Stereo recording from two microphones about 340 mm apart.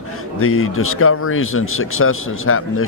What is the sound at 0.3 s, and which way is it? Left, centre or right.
Speech, left.